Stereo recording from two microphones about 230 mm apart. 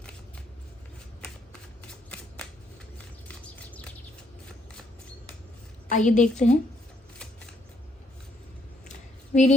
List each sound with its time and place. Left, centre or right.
3.2 s chirp: centre
5.9 s a woman's voice: left
8.9 s a sound: left